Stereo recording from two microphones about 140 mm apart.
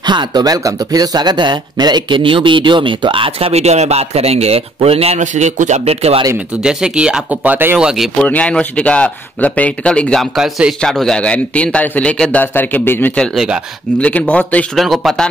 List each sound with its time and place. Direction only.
0.0 s speech: 30° right (ahead or behind); by 6.2 s 45° right (ahead or behind)
6.6 s speech: 5° right (ahead or behind)
8.3 s speech: 10° left (ahead or behind)
13.9 s speech: 10° left (ahead or behind)
14.8 s speech: centre (ahead or behind)